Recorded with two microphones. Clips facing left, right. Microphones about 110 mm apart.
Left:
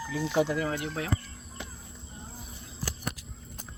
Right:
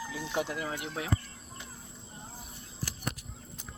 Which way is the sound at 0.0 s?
5° right (ahead or behind).